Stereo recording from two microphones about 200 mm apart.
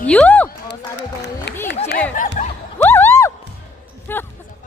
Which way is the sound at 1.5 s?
55° left (ahead or behind).